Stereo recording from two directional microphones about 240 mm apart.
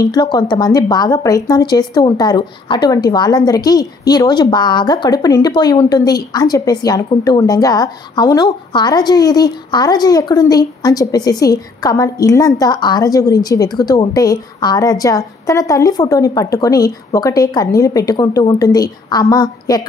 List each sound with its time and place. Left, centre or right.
0.0 s speech: centre